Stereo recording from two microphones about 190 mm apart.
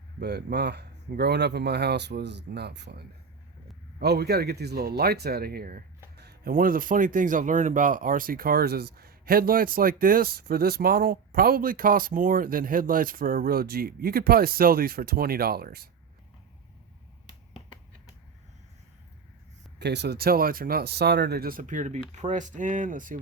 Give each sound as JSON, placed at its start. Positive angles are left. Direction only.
{"t": 0.2, "sound": "speech", "side_deg": -60}
{"t": 19.8, "sound": "speech", "side_deg": -60}